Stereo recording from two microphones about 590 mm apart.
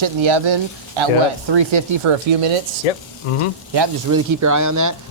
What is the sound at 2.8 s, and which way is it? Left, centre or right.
Speech, left.